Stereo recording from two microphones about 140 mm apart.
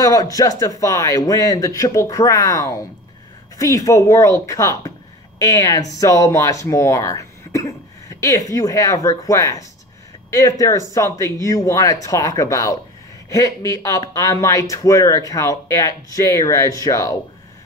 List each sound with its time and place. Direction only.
0.0 s speech: 25° left (ahead or behind)